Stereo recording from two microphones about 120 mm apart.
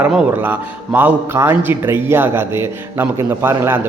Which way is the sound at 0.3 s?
15° right (ahead or behind).